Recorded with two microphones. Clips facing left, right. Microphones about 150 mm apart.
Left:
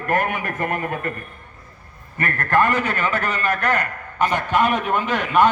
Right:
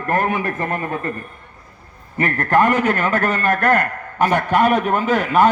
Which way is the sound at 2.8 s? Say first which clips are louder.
Right 5 dB; 45° right (ahead or behind).